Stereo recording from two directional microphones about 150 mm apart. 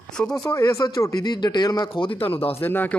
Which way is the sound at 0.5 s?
25° left (ahead or behind).